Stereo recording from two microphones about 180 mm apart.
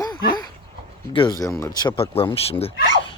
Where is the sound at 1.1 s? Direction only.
25° left (ahead or behind).